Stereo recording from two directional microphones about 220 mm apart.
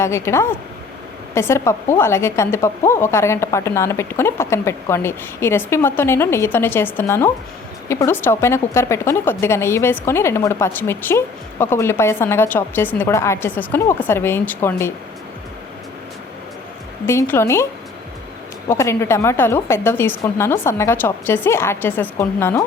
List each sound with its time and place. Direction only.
0.0 s speech: 10° left (ahead or behind)
17.1 s speech: 10° left (ahead or behind)
18.7 s speech: 10° left (ahead or behind)